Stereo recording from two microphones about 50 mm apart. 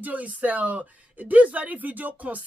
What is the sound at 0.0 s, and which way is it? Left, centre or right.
A woman's voice, right.